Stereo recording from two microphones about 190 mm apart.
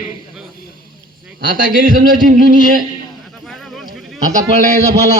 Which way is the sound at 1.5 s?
50° right (ahead or behind).